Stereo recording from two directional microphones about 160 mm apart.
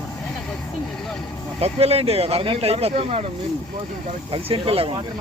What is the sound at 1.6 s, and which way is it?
Speech, 40° right (ahead or behind).